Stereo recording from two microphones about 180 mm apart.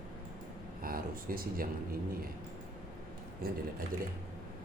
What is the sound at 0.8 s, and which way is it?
Speech, 55° right (ahead or behind).